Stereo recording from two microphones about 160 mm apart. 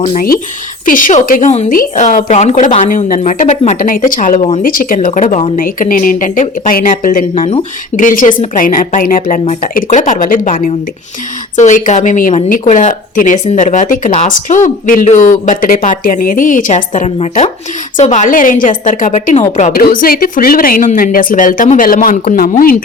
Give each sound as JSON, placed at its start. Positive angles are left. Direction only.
{"t": 0.0, "sound": "a woman's voice", "side_deg": 60}
{"t": 7.3, "sound": "speech", "side_deg": 35}
{"t": 7.9, "sound": "speech", "side_deg": 55}
{"t": 11.5, "sound": "a woman's voice", "side_deg": 50}
{"t": 19.8, "sound": "speech", "side_deg": 65}